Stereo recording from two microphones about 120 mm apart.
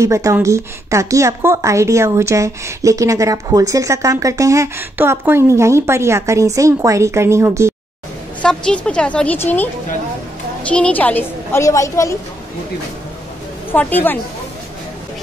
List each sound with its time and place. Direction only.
0.0 s a woman's voice: 25° right (ahead or behind)
8.4 s a woman's voice: 10° left (ahead or behind)
10.7 s a woman's voice: 10° left (ahead or behind)
13.7 s a woman's voice: 15° left (ahead or behind)